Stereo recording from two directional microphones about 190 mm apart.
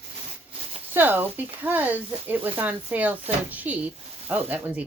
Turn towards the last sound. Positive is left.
turn(degrees=-10)  # may be behind; listen again after turning